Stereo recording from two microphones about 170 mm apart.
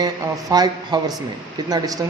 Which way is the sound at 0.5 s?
25° right (ahead or behind).